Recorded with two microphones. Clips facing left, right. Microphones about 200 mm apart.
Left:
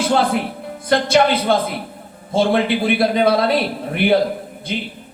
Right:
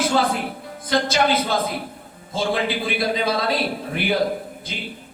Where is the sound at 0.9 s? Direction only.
60° left (ahead or behind).